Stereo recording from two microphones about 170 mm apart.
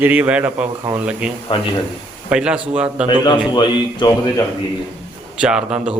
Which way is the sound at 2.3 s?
5° right (ahead or behind).